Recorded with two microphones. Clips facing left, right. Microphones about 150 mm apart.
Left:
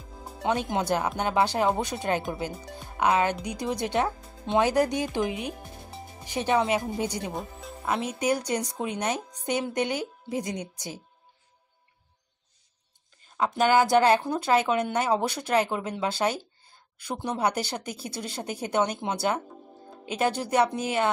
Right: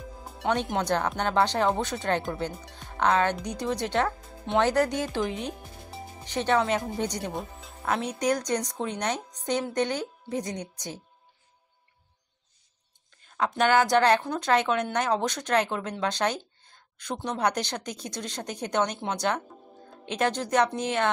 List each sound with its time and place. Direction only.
0.5 s a woman's voice: 10° left (ahead or behind)
13.4 s a woman's voice: 10° left (ahead or behind)